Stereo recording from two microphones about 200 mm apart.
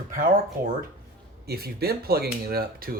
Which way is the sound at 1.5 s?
50° right (ahead or behind).